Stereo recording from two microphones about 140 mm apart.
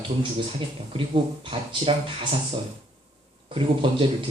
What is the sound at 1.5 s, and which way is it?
Speech, 40° right (ahead or behind).